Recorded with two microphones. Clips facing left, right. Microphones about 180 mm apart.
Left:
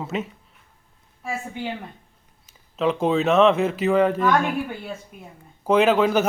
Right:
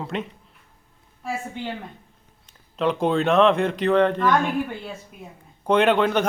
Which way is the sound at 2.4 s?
Centre (ahead or behind).